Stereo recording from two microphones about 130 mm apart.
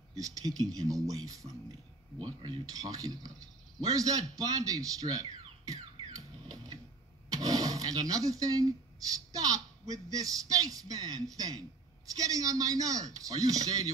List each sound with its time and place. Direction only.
0.1 s speech: 25° right (ahead or behind)
5.7 s a sound: 30° right (ahead or behind)
9.3 s speech: 30° right (ahead or behind)